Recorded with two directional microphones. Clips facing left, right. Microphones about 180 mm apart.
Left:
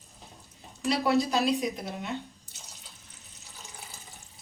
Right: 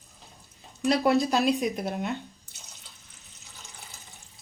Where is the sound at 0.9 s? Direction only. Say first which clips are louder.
Right 3 dB; 55° right (ahead or behind).